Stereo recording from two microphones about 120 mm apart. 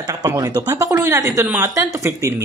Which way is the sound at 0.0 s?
30° right (ahead or behind).